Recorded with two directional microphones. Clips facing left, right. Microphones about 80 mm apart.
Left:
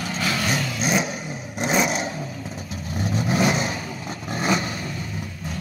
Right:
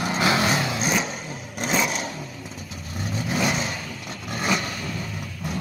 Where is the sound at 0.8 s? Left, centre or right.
Centre.